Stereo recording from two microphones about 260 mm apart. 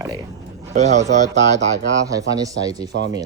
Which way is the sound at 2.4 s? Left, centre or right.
Centre.